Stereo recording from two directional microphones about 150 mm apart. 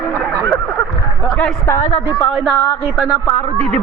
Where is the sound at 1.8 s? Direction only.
45° left (ahead or behind).